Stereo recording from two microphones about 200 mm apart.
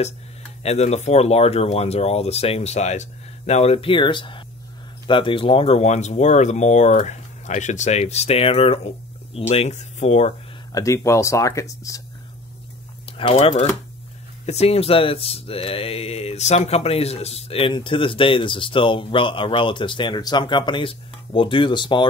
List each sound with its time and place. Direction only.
0.7 s speech: 35° left (ahead or behind)
10.7 s speech: 15° left (ahead or behind)
13.0 s speech: 30° left (ahead or behind)